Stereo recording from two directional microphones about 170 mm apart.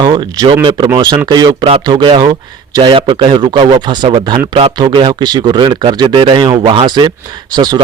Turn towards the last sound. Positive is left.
turn(degrees=-25)  # may be behind; listen again after turning